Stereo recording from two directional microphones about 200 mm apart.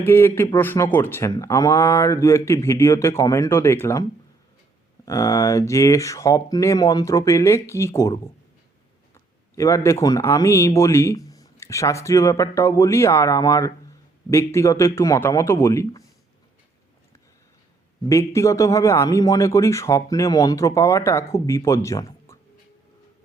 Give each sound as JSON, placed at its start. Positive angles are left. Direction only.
{"t": 0.0, "sound": "speech", "side_deg": 10}
{"t": 5.0, "sound": "speech", "side_deg": 15}
{"t": 18.1, "sound": "speech", "side_deg": 15}